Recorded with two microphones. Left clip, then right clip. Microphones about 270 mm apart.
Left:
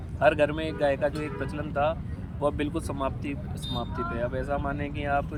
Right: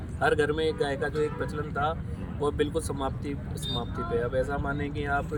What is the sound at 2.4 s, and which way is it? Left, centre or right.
Speech, centre.